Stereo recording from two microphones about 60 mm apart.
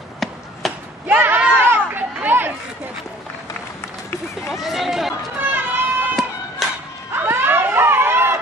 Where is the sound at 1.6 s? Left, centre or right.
Right.